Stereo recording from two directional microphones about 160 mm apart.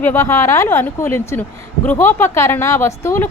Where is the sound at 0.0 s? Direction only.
15° left (ahead or behind).